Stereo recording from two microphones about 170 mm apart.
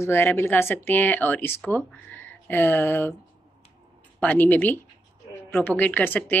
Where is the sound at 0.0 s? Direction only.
15° left (ahead or behind).